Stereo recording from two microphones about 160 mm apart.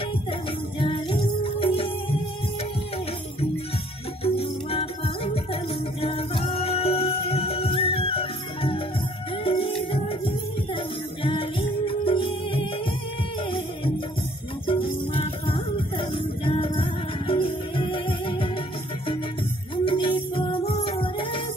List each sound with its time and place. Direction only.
0.7 s music: 30° left (ahead or behind)
4.2 s music: 35° left (ahead or behind)
14.7 s music: 35° left (ahead or behind)
19.8 s music: 30° left (ahead or behind)